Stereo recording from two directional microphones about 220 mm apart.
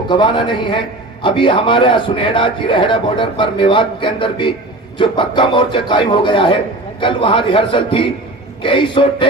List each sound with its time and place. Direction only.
0.1 s a man's voice: 20° left (ahead or behind)